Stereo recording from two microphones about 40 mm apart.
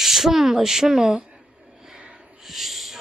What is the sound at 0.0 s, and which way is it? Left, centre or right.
Speech, centre.